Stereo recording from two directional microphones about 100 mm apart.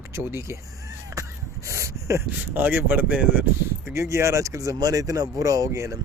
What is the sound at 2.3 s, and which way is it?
Speech, 20° right (ahead or behind).